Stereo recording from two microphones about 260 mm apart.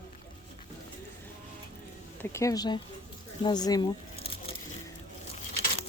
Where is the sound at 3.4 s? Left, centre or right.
Centre.